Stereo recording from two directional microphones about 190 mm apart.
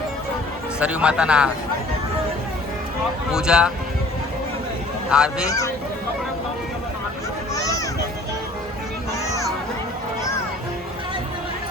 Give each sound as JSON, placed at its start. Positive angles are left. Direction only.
{"t": 0.8, "sound": "a man's voice", "side_deg": -5}
{"t": 3.3, "sound": "a man's voice", "side_deg": -5}
{"t": 5.1, "sound": "a man's voice", "side_deg": -5}
{"t": 5.5, "sound": "speech", "side_deg": 15}
{"t": 7.5, "sound": "a sound", "side_deg": 15}